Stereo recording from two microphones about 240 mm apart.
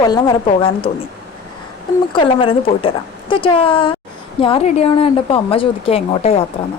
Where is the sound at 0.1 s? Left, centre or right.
Centre.